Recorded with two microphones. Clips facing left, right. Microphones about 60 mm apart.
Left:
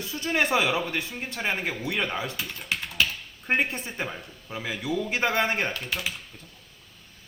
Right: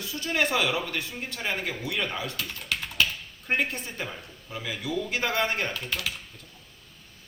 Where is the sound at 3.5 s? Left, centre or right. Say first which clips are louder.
Left 2 dB; centre.